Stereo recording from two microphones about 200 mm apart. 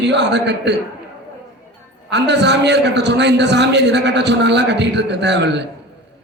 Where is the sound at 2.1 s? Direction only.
60° right (ahead or behind).